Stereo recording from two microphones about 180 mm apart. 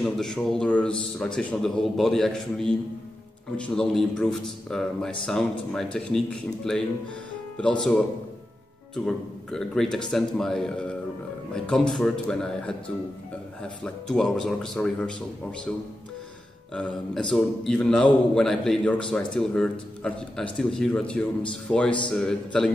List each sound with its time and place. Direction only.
0.0 s a man's voice: 5° left (ahead or behind)
13.8 s a man's voice: 5° left (ahead or behind)
16.7 s a man's voice: 5° left (ahead or behind)